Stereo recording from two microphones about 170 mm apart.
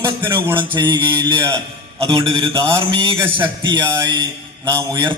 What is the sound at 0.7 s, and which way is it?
A man's voice, 25° right (ahead or behind).